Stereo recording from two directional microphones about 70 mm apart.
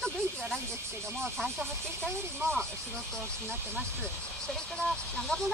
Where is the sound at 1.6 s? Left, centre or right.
Right.